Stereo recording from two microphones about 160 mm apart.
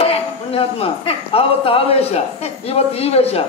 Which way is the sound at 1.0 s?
35° left (ahead or behind).